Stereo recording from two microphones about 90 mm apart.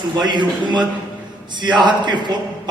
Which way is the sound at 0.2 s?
55° right (ahead or behind).